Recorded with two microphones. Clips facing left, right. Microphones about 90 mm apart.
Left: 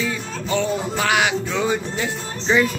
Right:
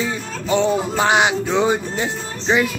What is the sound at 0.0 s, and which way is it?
Music, 25° right (ahead or behind).